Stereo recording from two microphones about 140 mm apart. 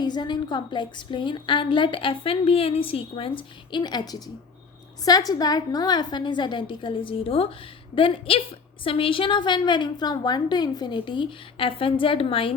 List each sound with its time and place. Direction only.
0.0 s a woman's voice: 30° left (ahead or behind)